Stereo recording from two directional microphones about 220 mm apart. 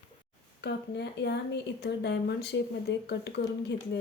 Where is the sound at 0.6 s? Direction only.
50° left (ahead or behind).